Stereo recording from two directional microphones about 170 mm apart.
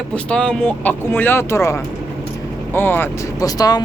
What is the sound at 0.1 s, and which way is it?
Speech, 5° left (ahead or behind).